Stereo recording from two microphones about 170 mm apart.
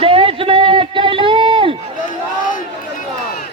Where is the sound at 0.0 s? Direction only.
35° right (ahead or behind).